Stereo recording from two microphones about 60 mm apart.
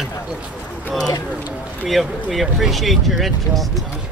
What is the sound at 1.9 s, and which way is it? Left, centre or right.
Speech, centre.